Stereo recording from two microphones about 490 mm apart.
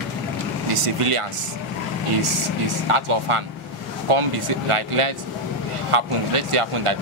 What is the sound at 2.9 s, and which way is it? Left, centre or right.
Speech, right.